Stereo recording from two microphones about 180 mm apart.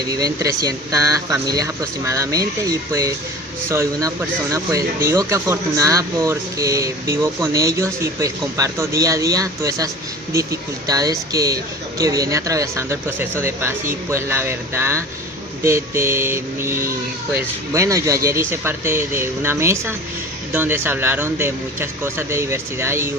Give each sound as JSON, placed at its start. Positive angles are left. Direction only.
{"t": 0.1, "sound": "speech", "side_deg": -20}